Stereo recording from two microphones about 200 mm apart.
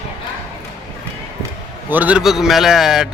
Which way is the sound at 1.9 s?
5° right (ahead or behind).